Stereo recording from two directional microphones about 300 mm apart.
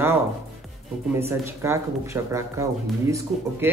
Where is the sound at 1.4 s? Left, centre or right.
Centre.